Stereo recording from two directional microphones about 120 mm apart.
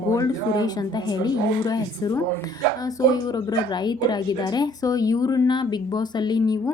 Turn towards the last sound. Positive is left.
turn(degrees=35)  # may be behind; listen again after turning